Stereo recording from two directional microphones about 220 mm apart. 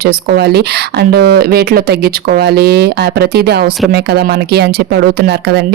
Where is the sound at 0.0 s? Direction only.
45° right (ahead or behind).